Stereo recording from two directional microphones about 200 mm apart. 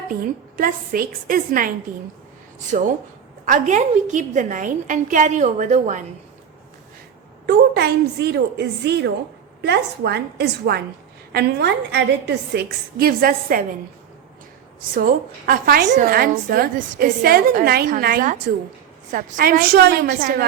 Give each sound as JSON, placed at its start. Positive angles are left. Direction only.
{"t": 0.5, "sound": "a woman's voice", "side_deg": -45}
{"t": 2.7, "sound": "a woman's voice", "side_deg": -40}
{"t": 7.4, "sound": "a woman's voice", "side_deg": -55}
{"t": 14.9, "sound": "a woman's voice", "side_deg": -45}